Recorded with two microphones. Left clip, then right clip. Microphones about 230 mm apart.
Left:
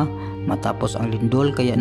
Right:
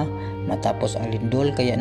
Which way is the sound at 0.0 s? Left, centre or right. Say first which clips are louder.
Left 2 dB; left.